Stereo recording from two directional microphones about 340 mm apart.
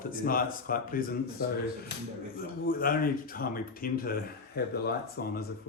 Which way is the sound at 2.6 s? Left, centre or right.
Left.